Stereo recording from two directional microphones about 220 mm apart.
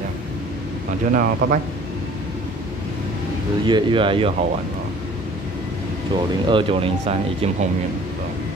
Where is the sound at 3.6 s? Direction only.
20° right (ahead or behind).